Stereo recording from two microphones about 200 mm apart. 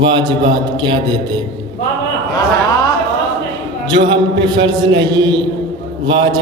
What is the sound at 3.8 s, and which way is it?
A man's voice, 20° right (ahead or behind).